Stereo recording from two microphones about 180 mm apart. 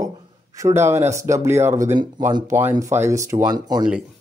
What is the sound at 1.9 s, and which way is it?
Speech, 25° right (ahead or behind).